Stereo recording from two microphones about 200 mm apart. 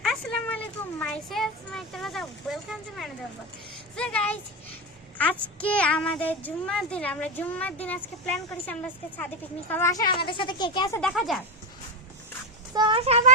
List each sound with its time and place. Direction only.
0.0 s a sound: 5° left (ahead or behind)
3.9 s a child's voice: 5° left (ahead or behind)
11.0 s speech: centre (ahead or behind)
12.7 s a child's voice: 25° right (ahead or behind)